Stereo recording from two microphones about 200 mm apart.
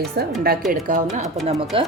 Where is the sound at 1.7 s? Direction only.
25° right (ahead or behind).